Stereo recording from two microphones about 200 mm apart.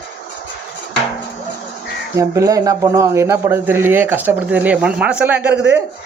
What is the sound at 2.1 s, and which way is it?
Speech, 15° right (ahead or behind).